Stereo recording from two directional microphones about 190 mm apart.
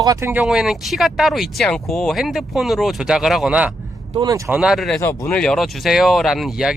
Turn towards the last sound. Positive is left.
turn(degrees=0)  # may be behind; listen again after turning